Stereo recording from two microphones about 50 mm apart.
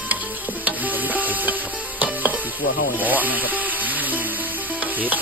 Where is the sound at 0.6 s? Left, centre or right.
Right.